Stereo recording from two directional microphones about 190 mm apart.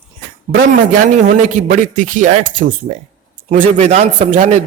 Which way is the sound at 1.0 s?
40° right (ahead or behind).